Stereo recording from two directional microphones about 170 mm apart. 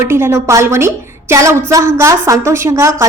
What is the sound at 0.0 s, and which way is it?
A woman's voice, 15° right (ahead or behind).